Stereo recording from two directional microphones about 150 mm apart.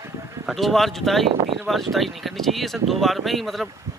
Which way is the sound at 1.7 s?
Centre (ahead or behind).